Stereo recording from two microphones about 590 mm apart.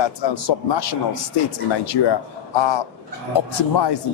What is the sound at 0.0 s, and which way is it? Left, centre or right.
A man's voice, left.